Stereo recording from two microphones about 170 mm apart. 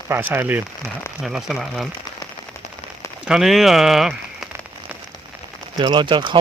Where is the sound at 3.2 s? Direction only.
Centre (ahead or behind).